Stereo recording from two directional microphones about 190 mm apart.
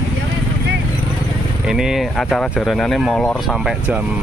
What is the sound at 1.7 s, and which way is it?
Speech, centre (ahead or behind).